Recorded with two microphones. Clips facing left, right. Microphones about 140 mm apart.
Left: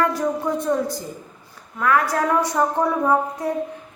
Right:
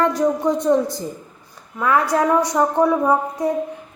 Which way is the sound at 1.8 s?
25° right (ahead or behind).